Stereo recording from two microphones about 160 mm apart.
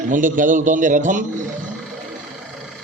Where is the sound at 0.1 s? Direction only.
55° right (ahead or behind).